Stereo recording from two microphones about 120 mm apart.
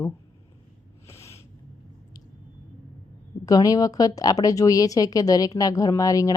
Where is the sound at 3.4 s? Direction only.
30° left (ahead or behind).